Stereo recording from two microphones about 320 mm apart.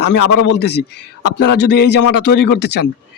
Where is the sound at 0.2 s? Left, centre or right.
Left.